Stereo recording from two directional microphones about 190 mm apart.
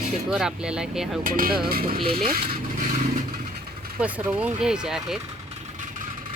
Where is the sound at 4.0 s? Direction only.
10° right (ahead or behind).